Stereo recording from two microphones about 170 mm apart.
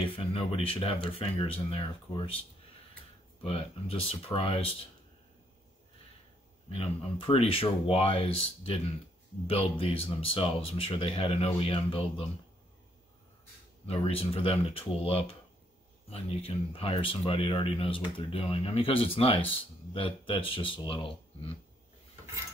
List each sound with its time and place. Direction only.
0.1 s speech: 35° left (ahead or behind)
3.4 s speech: 35° left (ahead or behind)
6.7 s speech: 35° left (ahead or behind)
13.8 s speech: 35° left (ahead or behind)